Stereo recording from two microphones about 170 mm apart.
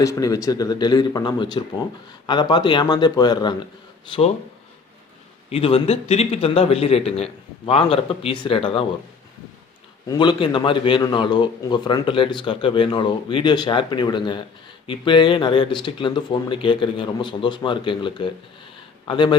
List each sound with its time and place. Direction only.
0.0 s a man's voice: 20° left (ahead or behind)
5.5 s a man's voice: 35° left (ahead or behind)
10.1 s a man's voice: 25° left (ahead or behind)